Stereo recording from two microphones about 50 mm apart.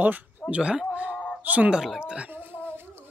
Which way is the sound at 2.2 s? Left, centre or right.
Right.